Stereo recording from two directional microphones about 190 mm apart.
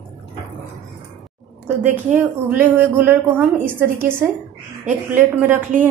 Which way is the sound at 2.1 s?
10° right (ahead or behind).